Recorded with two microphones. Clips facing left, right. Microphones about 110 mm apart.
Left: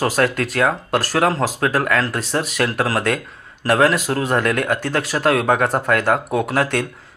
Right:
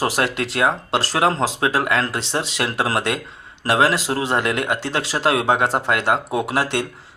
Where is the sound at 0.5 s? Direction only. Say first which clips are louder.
Left 1 dB; 20° right (ahead or behind).